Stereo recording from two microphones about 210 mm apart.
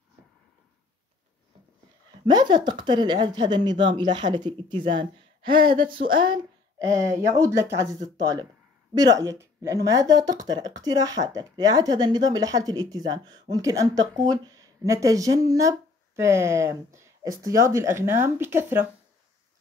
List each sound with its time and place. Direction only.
2.2 s speech: 20° right (ahead or behind)